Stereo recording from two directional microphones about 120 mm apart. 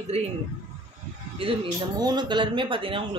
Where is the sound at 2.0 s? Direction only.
35° right (ahead or behind).